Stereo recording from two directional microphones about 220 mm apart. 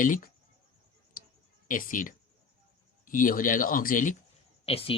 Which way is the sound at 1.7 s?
35° left (ahead or behind).